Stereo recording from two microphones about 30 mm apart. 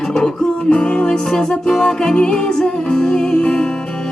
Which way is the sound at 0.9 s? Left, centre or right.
Left.